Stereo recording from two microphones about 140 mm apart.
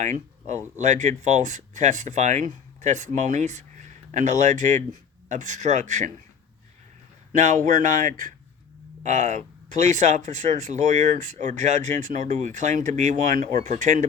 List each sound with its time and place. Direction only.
0.0 s speech: 55° right (ahead or behind)
7.3 s speech: 60° right (ahead or behind)
9.0 s speech: 60° right (ahead or behind)